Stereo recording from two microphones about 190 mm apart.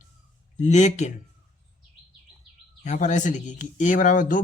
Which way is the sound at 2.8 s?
40° left (ahead or behind).